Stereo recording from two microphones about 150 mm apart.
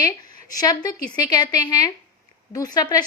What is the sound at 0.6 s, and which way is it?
A woman's voice, 25° left (ahead or behind).